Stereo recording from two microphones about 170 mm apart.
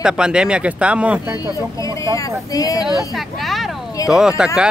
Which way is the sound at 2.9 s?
Centre (ahead or behind).